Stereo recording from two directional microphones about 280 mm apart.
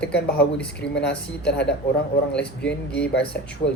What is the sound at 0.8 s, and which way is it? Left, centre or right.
Speech, left.